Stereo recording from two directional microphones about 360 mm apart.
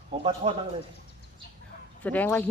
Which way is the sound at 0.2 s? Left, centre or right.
Centre.